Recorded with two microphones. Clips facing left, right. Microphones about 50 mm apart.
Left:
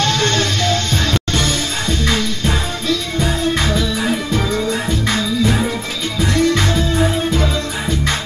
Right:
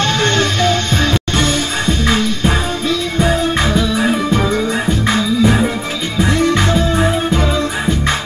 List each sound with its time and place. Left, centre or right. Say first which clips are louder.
0.0 s music: right 2 dB; centre